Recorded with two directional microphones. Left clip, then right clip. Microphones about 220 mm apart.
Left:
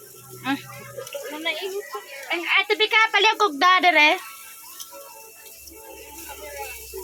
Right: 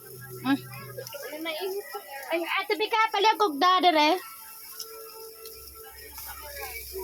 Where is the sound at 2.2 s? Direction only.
5° left (ahead or behind); by 4.2 s 20° right (ahead or behind).